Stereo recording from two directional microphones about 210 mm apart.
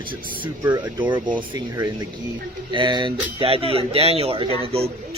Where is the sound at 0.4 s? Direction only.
15° right (ahead or behind).